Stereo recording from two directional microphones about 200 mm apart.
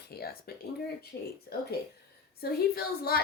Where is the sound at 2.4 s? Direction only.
50° left (ahead or behind).